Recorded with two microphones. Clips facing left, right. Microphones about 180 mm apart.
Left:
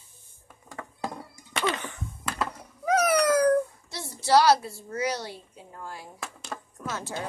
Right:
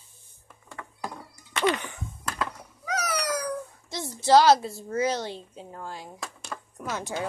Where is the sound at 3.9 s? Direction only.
25° right (ahead or behind).